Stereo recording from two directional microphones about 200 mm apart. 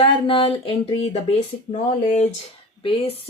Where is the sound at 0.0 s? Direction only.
25° left (ahead or behind).